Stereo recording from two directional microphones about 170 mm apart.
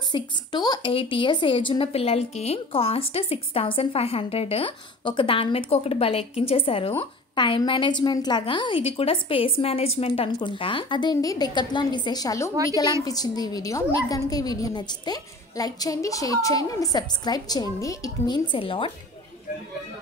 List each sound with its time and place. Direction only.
0.1 s a woman's voice: 25° left (ahead or behind)